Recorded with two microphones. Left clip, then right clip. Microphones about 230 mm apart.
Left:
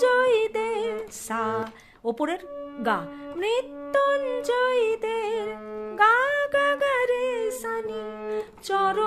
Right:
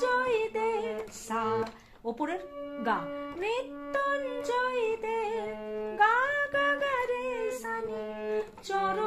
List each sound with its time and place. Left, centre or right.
0.0 s female singing: left
2.0 s music: left
3.4 s music: left